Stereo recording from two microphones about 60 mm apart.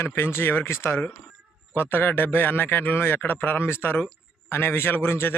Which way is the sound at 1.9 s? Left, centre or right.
Left.